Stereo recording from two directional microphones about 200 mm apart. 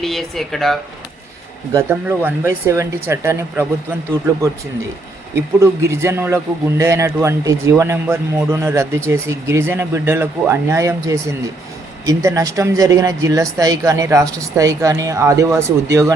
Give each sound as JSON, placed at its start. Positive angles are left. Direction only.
{"t": 0.0, "sound": "speech", "side_deg": 0}
{"t": 1.7, "sound": "speech", "side_deg": -10}
{"t": 5.3, "sound": "speech", "side_deg": -15}